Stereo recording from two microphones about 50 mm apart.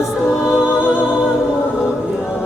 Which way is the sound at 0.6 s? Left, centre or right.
Right.